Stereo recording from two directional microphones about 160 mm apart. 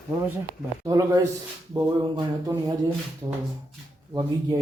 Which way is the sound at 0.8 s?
20° right (ahead or behind).